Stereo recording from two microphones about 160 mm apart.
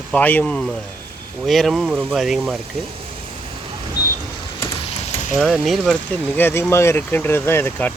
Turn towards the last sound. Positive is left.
turn(degrees=15)  # may be behind; listen again after turning